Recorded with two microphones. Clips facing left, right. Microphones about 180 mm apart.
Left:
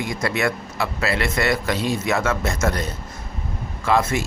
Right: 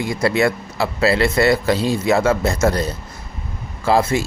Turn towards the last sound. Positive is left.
turn(degrees=-30)  # may be behind; listen again after turning